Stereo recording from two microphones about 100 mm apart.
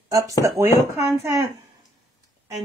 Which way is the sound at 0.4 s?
30° right (ahead or behind).